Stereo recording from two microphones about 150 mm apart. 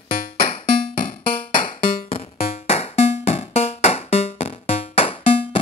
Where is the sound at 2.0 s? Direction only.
45° left (ahead or behind).